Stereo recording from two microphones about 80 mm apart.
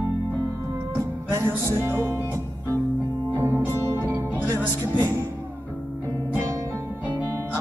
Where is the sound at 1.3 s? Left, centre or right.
Right.